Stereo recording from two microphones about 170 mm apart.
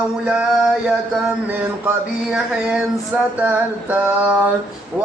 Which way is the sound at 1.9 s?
5° right (ahead or behind).